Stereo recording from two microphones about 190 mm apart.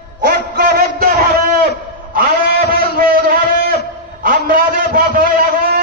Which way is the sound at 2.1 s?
50° right (ahead or behind).